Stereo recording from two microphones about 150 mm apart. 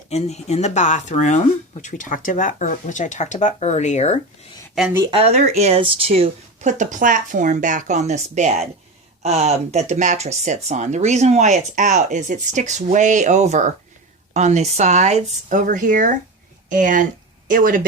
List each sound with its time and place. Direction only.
0.1 s speech: 45° left (ahead or behind)
5.1 s speech: 45° right (ahead or behind); by 17.8 s 65° right (ahead or behind)